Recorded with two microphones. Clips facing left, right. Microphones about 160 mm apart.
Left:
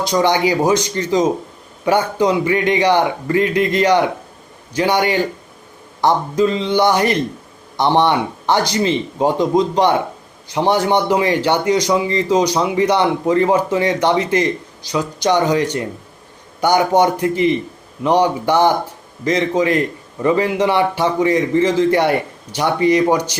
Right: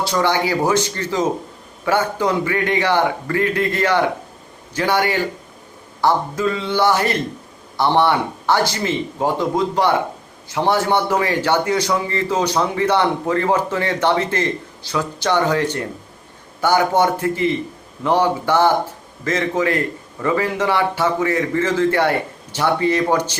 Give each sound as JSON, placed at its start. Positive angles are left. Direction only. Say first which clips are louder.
{"t": 0.0, "sound": "a man's voice", "louder": "left 3 dB", "side_deg": 15}